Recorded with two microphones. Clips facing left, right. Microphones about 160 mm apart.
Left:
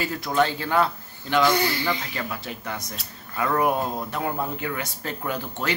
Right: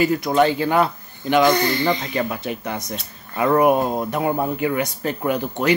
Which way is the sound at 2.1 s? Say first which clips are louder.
Right 8 dB; 20° right (ahead or behind).